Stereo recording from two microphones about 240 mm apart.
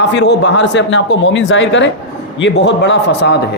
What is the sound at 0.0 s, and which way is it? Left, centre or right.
A man's voice, left.